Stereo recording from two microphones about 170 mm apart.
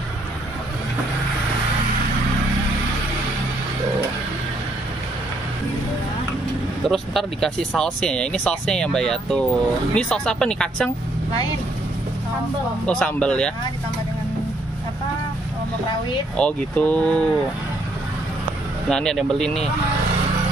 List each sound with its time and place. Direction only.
6.9 s speech: centre (ahead or behind)
12.8 s speech: 10° left (ahead or behind)
16.3 s speech: 10° left (ahead or behind)
18.9 s speech: 5° left (ahead or behind)